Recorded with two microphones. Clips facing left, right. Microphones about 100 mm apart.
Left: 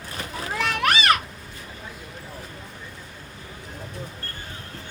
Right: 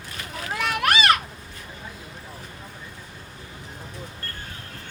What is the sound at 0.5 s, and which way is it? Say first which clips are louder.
Children playing: even; 5° right (ahead or behind).